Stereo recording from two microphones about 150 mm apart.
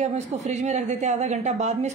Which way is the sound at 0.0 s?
50° right (ahead or behind).